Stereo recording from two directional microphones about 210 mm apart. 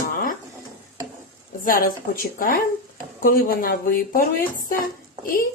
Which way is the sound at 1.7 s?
45° left (ahead or behind).